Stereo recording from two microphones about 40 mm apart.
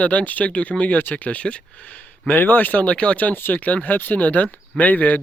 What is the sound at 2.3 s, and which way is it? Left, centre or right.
Speech, left.